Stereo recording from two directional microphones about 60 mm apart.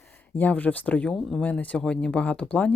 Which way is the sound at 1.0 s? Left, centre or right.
Centre.